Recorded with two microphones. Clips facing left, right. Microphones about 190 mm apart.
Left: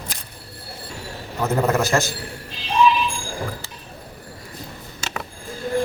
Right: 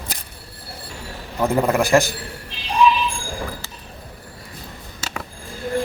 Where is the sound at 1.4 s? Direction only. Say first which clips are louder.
Right 2 dB; 15° right (ahead or behind).